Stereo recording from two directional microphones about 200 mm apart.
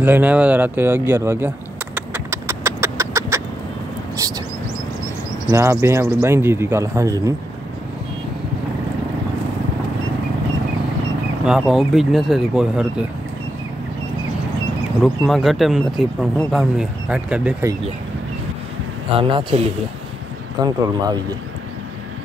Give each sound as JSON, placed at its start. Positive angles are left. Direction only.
{"t": 0.0, "sound": "speech", "side_deg": -10}
{"t": 2.0, "sound": "a sound", "side_deg": -10}
{"t": 5.5, "sound": "speech", "side_deg": -15}
{"t": 11.4, "sound": "speech", "side_deg": -5}
{"t": 15.0, "sound": "speech", "side_deg": 0}
{"t": 19.1, "sound": "speech", "side_deg": -25}